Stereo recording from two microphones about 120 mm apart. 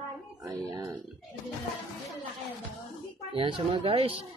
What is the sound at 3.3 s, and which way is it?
Speech, 45° right (ahead or behind).